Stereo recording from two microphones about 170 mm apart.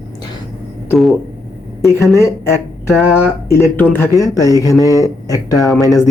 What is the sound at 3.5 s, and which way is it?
Speech, 10° left (ahead or behind).